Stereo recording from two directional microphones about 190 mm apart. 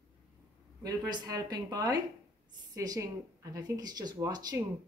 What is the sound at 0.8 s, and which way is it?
A woman's voice, 20° right (ahead or behind).